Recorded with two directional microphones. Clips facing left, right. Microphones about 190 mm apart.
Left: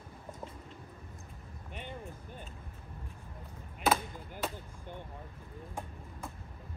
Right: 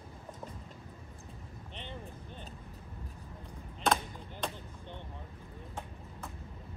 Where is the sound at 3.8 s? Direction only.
10° left (ahead or behind).